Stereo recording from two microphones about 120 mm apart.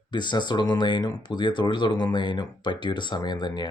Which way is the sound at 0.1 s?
40° left (ahead or behind).